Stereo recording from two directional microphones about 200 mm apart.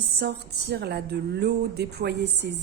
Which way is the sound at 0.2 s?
55° right (ahead or behind).